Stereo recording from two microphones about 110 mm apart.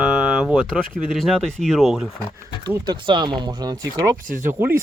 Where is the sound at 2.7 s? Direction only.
45° right (ahead or behind).